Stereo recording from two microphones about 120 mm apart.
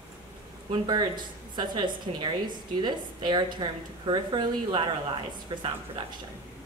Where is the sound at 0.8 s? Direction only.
35° right (ahead or behind).